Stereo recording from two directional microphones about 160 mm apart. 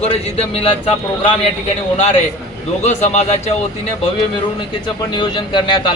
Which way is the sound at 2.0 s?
40° left (ahead or behind).